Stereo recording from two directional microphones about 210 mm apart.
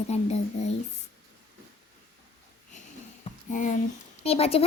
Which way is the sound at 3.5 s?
40° left (ahead or behind).